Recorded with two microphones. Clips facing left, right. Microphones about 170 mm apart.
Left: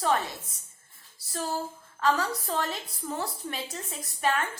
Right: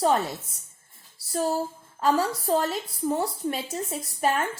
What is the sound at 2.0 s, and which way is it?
A woman's voice, 35° right (ahead or behind).